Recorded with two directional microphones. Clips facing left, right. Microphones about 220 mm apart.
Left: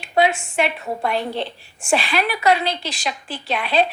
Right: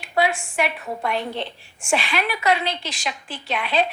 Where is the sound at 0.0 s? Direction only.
25° left (ahead or behind).